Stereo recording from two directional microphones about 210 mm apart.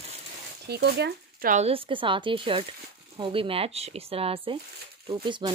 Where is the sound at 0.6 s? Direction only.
50° right (ahead or behind).